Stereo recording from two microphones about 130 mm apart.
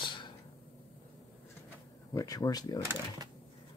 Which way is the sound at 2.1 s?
25° left (ahead or behind).